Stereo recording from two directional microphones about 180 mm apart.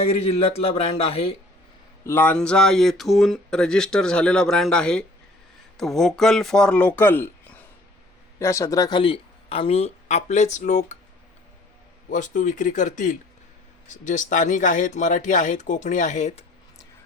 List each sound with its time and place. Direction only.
0.0 s speech: 35° left (ahead or behind)
2.0 s speech: 10° left (ahead or behind); by 10.9 s 45° left (ahead or behind)
12.1 s speech: 45° left (ahead or behind)